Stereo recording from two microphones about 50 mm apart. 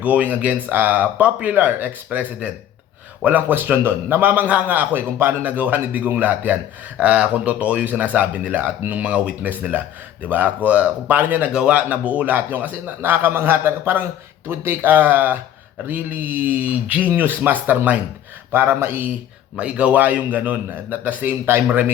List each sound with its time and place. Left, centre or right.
0.0 s speech: right
4.4 s speech: right
11.5 s a man's voice: right
17.1 s speech: right
18.5 s a man's voice: right
19.5 s speech: right